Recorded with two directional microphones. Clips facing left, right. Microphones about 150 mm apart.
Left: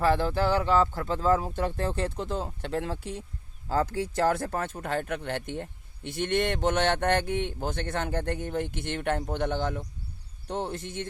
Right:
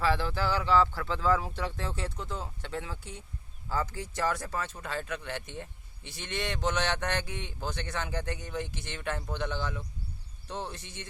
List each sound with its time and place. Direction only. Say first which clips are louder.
0.0 s speech: left 5 dB; 50° left (ahead or behind)